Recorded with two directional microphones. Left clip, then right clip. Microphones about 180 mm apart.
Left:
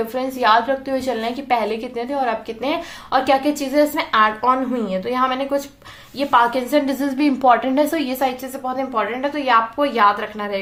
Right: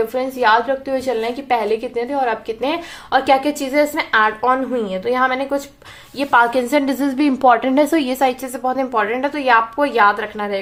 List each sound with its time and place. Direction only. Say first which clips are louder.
0.1 s a woman's voice: left 3 dB; 20° right (ahead or behind)